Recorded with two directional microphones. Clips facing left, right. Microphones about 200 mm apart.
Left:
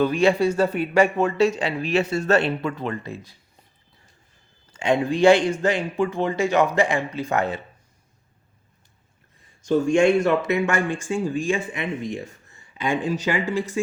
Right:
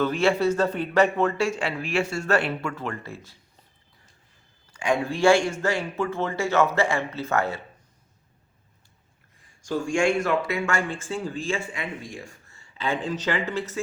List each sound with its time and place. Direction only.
0.0 s speech: 15° left (ahead or behind)
4.7 s speech: 25° left (ahead or behind)
9.6 s speech: 20° left (ahead or behind)